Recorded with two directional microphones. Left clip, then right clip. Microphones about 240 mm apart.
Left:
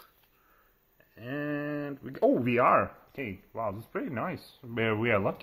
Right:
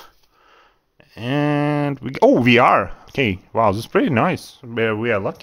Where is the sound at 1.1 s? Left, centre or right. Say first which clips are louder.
Right 14 dB; right.